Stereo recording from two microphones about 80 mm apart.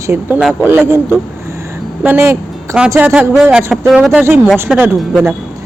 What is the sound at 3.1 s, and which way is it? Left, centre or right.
Speech, centre.